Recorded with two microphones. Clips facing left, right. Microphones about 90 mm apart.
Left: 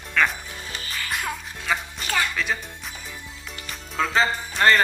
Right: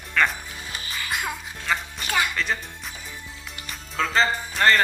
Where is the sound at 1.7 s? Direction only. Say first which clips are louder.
Even; 5° left (ahead or behind).